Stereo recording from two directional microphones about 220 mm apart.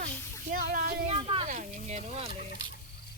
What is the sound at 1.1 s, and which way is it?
Speech, 25° right (ahead or behind).